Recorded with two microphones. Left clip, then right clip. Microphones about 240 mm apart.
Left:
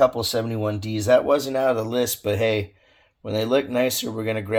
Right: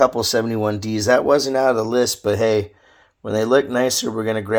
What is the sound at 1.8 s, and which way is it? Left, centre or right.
Speech, right.